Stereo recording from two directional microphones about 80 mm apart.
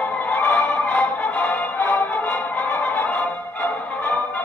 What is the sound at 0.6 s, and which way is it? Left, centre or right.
Music, centre.